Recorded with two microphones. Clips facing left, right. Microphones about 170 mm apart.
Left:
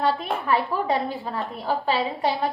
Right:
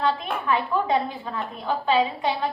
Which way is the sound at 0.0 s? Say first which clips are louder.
Left 1 dB; 35° left (ahead or behind).